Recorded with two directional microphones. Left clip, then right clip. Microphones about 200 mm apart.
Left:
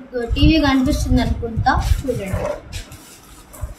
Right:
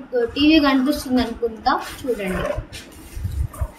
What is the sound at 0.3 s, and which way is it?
Speech, centre (ahead or behind).